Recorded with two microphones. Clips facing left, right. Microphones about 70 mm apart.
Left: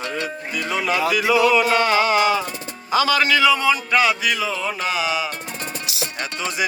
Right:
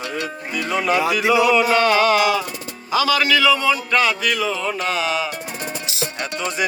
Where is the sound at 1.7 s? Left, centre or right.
Centre.